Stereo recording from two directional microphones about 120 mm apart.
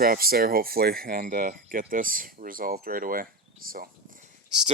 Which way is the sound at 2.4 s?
90° right.